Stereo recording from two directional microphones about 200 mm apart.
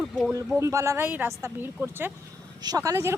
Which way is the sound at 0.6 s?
15° right (ahead or behind).